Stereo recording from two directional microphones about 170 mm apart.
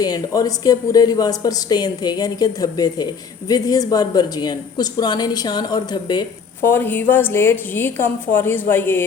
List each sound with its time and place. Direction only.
0.0 s a woman's voice: 20° left (ahead or behind)
6.6 s a woman's voice: 15° left (ahead or behind)